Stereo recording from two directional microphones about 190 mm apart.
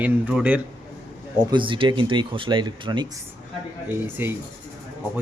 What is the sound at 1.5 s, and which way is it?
Speech, 25° right (ahead or behind).